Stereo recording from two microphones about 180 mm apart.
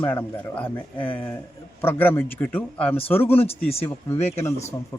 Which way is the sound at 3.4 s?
35° left (ahead or behind).